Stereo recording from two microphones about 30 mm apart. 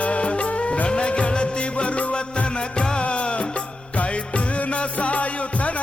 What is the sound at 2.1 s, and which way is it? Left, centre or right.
Music, left.